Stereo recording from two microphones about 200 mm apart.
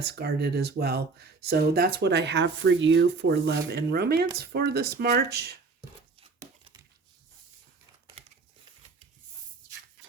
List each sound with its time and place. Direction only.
0.0 s speech: 55° right (ahead or behind)